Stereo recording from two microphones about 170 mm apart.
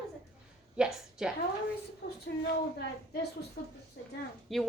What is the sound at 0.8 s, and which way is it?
Speech, 5° right (ahead or behind).